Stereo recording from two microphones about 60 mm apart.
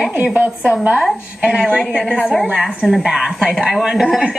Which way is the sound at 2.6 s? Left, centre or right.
Centre.